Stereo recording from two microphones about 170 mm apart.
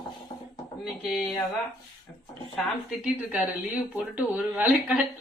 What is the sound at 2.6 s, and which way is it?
Speech, 5° right (ahead or behind).